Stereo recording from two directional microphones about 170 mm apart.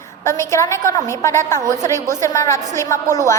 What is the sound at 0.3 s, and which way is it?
A woman's voice, 15° left (ahead or behind).